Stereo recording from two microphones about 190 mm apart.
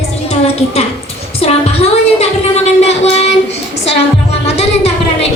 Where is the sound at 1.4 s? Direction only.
30° left (ahead or behind).